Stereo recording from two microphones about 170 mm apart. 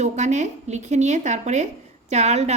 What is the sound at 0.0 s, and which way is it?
Speech, 45° right (ahead or behind).